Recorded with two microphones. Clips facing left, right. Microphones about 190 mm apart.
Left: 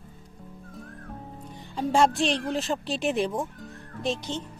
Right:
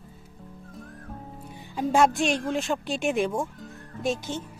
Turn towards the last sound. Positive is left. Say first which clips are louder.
# right 1 dB
turn(degrees=-5)  # may be behind; listen again after turning